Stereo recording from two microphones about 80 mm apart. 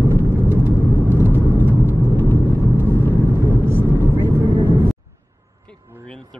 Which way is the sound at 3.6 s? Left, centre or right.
Right.